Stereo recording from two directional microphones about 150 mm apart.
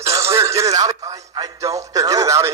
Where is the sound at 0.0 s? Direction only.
20° right (ahead or behind).